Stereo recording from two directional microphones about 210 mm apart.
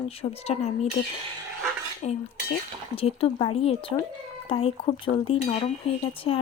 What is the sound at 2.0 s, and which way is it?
Cutlery, 30° left (ahead or behind).